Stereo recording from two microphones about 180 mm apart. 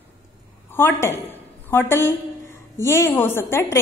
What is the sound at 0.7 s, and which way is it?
A woman's voice, 15° left (ahead or behind).